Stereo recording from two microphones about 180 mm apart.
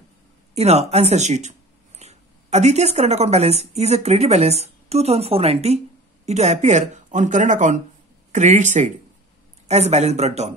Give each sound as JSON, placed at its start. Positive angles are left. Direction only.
{"t": 0.6, "sound": "a woman's voice", "side_deg": -35}